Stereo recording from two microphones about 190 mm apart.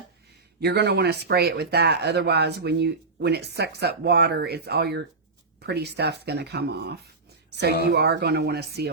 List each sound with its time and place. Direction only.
0.6 s speech: 60° right (ahead or behind)